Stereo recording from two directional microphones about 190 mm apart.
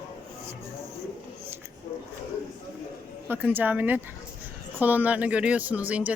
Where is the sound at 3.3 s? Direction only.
10° right (ahead or behind).